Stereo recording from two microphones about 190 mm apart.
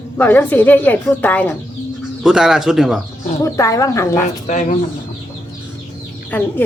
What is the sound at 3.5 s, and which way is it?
Speech, 15° left (ahead or behind).